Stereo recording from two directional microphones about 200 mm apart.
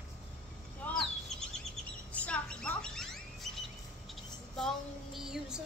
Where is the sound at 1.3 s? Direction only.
Centre (ahead or behind).